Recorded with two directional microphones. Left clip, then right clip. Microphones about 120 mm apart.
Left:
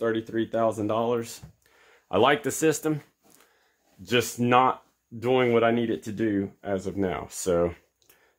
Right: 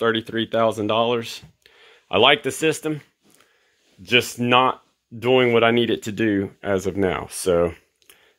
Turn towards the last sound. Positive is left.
turn(degrees=-10)  # may be behind; listen again after turning